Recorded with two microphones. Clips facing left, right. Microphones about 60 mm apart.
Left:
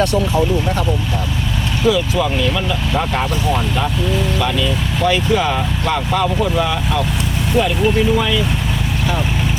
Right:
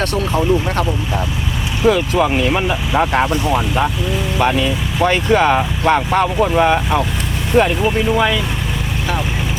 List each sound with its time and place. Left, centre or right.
1.9 s speech: right
4.4 s speech: right